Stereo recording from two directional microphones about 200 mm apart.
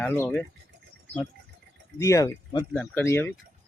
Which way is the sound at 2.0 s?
15° left (ahead or behind).